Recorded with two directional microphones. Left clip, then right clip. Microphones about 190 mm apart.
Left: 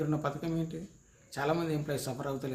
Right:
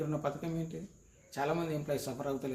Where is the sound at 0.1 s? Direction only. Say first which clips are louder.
Left 2 dB; 10° left (ahead or behind).